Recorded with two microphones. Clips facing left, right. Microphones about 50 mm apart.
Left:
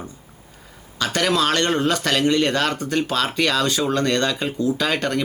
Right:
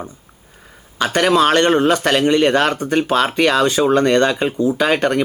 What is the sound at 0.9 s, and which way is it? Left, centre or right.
A man's voice, right.